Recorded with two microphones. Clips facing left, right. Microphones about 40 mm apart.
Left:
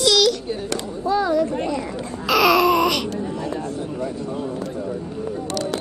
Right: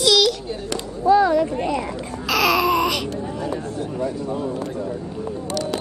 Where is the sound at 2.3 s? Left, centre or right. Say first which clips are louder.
Left 3 dB; centre.